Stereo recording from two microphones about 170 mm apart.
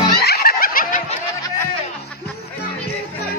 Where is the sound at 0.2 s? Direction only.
65° left (ahead or behind).